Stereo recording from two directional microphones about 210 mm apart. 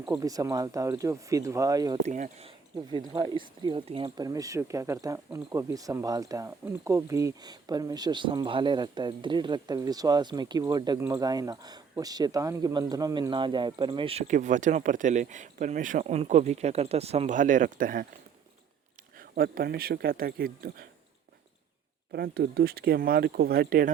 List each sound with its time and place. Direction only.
0.0 s speech: 15° right (ahead or behind)
2.0 s speech: 35° right (ahead or behind)
19.1 s speech: 45° right (ahead or behind)
22.1 s speech: 50° right (ahead or behind)